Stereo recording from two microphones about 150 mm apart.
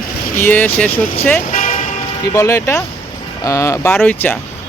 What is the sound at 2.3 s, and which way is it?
Speech, 20° left (ahead or behind).